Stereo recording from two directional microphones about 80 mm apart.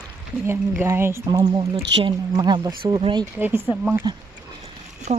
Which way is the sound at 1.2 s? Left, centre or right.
Right.